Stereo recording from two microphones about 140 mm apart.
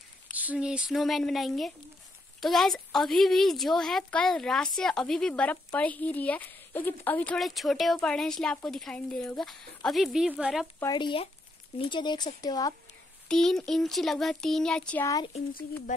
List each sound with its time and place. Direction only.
0.4 s speech: 10° right (ahead or behind); by 7.3 s 10° left (ahead or behind)
7.3 s speech: centre (ahead or behind)
10.9 s speech: 35° left (ahead or behind)
13.3 s speech: 5° left (ahead or behind)